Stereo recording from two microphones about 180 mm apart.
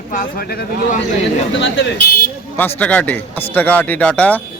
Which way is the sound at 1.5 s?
90° left.